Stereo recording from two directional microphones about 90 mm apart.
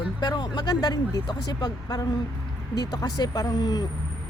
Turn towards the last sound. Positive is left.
turn(degrees=50)  # may be behind; listen again after turning